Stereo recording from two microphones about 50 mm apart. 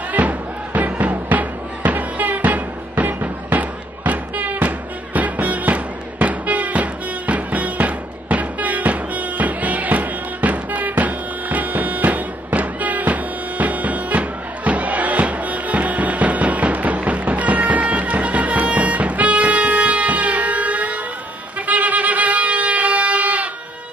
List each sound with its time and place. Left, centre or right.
0.1 s music: right